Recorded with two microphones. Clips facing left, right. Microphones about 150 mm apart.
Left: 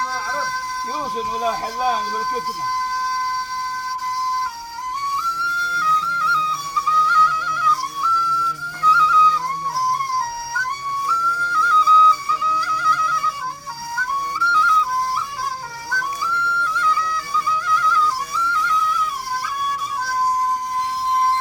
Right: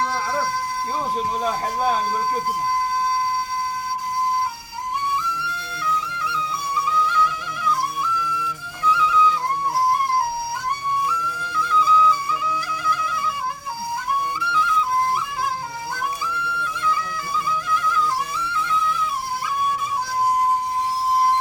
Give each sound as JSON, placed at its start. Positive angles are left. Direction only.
{"t": 1.4, "sound": "speech", "side_deg": 10}
{"t": 5.1, "sound": "music", "side_deg": -55}
{"t": 5.9, "sound": "music", "side_deg": -10}
{"t": 8.1, "sound": "flute", "side_deg": -15}
{"t": 11.2, "sound": "flute", "side_deg": -15}
{"t": 13.9, "sound": "flute", "side_deg": -15}
{"t": 16.2, "sound": "flute", "side_deg": -15}